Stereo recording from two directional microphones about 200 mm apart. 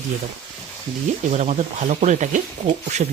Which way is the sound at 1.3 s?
35° right (ahead or behind).